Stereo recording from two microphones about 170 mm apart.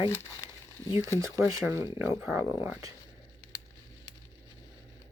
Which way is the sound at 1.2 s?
20° right (ahead or behind).